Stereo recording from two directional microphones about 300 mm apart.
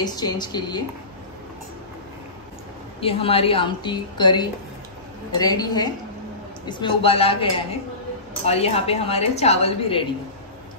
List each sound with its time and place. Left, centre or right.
0.0 s a woman's voice: centre
3.0 s a woman's voice: centre